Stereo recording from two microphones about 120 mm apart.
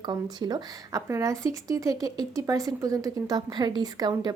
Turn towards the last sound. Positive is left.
turn(degrees=-35)  # may be behind; listen again after turning